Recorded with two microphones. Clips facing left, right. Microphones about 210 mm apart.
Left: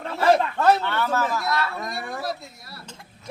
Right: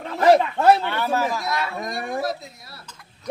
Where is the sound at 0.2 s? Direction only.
15° right (ahead or behind).